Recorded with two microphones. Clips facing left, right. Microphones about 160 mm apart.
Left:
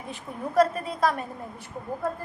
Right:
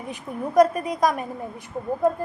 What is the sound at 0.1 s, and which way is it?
A woman's voice, 15° right (ahead or behind).